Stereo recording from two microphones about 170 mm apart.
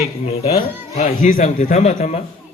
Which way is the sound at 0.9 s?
45° left (ahead or behind).